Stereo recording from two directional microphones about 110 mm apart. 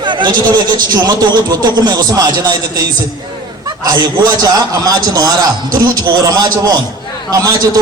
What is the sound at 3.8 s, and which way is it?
Speech, 35° right (ahead or behind).